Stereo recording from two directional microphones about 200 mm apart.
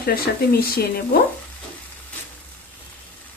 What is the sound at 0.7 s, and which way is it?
Speech, 50° left (ahead or behind).